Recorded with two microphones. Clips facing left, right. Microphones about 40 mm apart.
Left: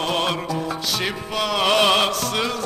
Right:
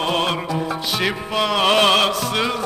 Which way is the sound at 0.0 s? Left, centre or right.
Centre.